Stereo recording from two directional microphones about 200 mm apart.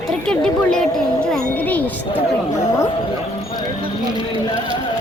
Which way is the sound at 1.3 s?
10° left (ahead or behind).